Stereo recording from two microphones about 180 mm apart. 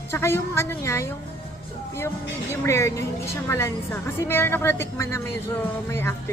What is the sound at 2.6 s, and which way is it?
A woman's voice, 15° left (ahead or behind).